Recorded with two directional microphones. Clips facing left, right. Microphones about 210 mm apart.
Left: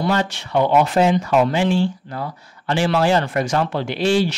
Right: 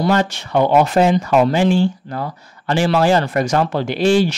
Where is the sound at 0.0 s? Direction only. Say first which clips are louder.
Right 4 dB; 45° right (ahead or behind).